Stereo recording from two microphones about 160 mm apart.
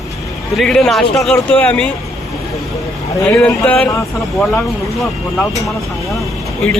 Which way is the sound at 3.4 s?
10° left (ahead or behind).